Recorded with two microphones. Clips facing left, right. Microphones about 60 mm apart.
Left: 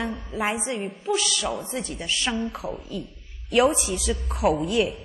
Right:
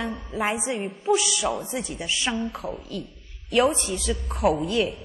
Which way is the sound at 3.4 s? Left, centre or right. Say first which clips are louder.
Left 1 dB; centre.